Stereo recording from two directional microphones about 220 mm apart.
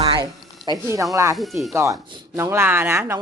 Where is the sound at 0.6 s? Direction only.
15° right (ahead or behind).